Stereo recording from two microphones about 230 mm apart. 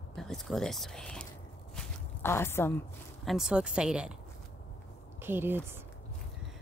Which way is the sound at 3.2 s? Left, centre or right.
Centre.